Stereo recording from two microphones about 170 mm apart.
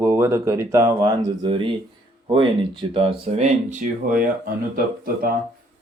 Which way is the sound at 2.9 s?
40° right (ahead or behind).